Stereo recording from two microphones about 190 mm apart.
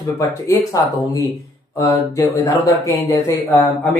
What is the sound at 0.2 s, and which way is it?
Speech, 15° left (ahead or behind).